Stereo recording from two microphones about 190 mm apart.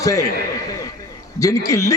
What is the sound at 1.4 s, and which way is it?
Speech, 15° left (ahead or behind).